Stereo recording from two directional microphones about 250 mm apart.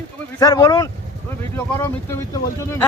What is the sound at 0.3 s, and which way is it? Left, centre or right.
Speech, centre.